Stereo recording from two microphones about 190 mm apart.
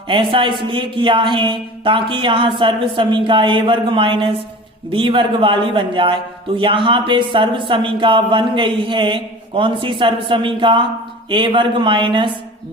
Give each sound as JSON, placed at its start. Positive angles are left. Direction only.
{"t": 0.1, "sound": "speech", "side_deg": -25}